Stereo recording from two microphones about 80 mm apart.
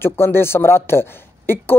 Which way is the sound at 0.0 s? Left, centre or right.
Left.